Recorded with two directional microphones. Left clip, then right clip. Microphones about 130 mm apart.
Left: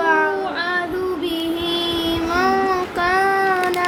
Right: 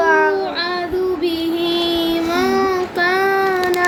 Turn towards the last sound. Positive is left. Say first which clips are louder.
# right 1 dB
turn(degrees=-30)  # may be behind; listen again after turning